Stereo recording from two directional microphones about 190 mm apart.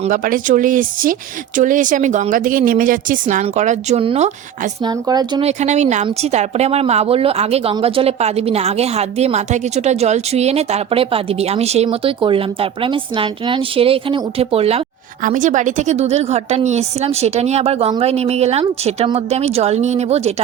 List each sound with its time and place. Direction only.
0.0 s speech: 45° right (ahead or behind)
4.8 s speech: 20° right (ahead or behind)
5.5 s speech: 35° right (ahead or behind)
15.2 s speech: 45° right (ahead or behind)